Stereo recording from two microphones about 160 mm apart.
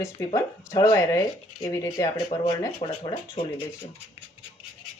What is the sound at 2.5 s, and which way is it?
Speech, 30° left (ahead or behind).